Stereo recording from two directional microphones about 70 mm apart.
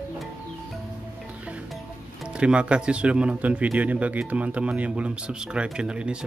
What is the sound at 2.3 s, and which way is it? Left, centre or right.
Speech, centre.